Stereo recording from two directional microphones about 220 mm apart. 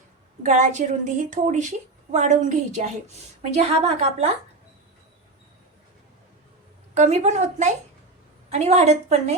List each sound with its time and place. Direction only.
0.4 s a woman's voice: 35° right (ahead or behind)
6.9 s a woman's voice: 30° right (ahead or behind)